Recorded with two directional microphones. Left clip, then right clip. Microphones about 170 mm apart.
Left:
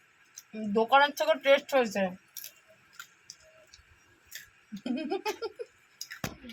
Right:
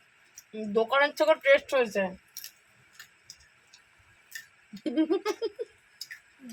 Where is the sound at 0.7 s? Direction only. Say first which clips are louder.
Left 1 dB; 20° right (ahead or behind).